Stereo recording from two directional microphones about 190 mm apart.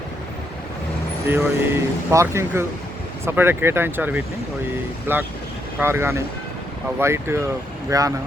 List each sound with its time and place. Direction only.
1.3 s speech: 10° right (ahead or behind)